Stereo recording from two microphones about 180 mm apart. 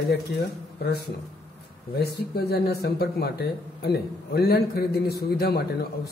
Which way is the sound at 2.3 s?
65° left (ahead or behind).